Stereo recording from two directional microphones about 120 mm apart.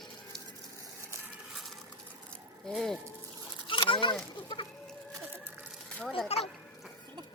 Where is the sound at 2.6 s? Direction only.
5° left (ahead or behind).